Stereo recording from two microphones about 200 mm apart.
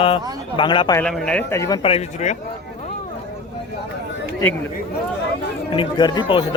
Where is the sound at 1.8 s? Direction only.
30° left (ahead or behind).